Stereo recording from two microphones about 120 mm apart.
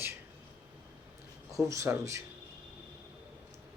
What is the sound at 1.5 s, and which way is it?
Speech, 25° right (ahead or behind).